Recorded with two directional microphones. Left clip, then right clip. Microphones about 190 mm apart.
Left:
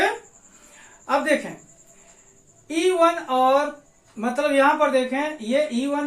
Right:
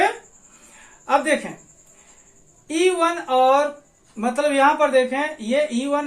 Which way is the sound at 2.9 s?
40° right (ahead or behind).